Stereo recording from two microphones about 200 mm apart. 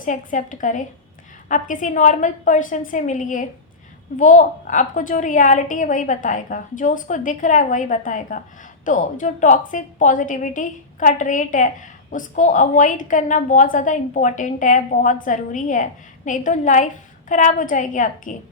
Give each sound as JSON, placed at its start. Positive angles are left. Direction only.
{"t": 0.0, "sound": "a woman's voice", "side_deg": 40}